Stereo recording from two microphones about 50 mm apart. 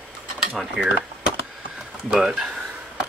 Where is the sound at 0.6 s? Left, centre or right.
Centre.